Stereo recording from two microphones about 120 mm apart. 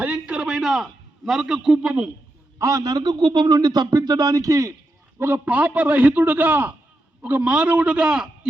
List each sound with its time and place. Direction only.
0.0 s a sound: 10° right (ahead or behind)
2.6 s a man's voice: 30° right (ahead or behind)
5.2 s a man's voice: 15° right (ahead or behind)